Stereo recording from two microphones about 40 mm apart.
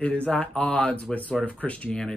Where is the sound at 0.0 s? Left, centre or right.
Left.